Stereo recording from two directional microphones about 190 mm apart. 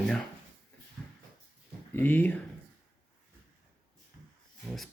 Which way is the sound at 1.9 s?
10° left (ahead or behind).